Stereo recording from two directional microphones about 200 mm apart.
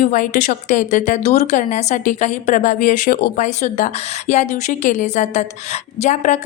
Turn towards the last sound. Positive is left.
turn(degrees=35)  # may be behind; listen again after turning